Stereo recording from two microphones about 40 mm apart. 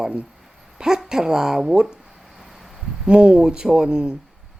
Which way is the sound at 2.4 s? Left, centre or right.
Centre.